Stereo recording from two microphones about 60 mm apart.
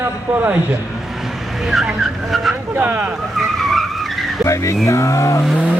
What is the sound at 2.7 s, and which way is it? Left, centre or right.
Speech, right.